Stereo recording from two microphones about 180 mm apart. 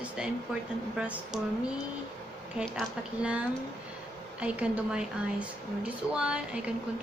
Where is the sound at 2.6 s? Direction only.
5° right (ahead or behind).